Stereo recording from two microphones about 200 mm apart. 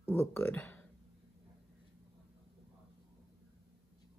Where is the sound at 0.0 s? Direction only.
10° left (ahead or behind).